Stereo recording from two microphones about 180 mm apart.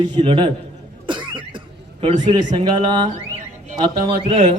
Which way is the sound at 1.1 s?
25° right (ahead or behind).